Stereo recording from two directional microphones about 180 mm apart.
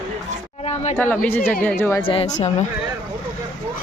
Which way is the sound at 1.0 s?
10° left (ahead or behind).